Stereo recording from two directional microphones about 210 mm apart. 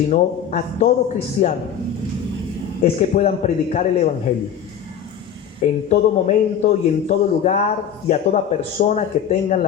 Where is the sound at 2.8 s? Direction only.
30° left (ahead or behind).